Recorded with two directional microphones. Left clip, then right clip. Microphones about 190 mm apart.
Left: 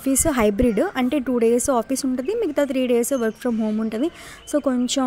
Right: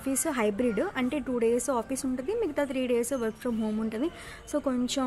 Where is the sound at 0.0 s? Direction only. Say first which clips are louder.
Left 9 dB; 35° left (ahead or behind).